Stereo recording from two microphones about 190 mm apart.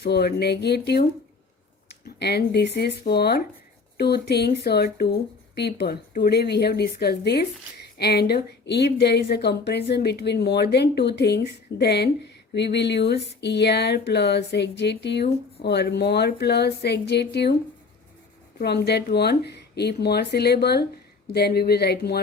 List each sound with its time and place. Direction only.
0.0 s speech: 60° left (ahead or behind)
2.0 s speech: 60° left (ahead or behind)
18.6 s speech: 60° left (ahead or behind)